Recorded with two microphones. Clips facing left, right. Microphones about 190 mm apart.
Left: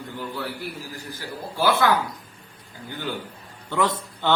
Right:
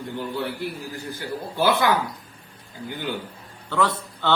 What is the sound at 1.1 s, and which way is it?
Speech, 20° right (ahead or behind).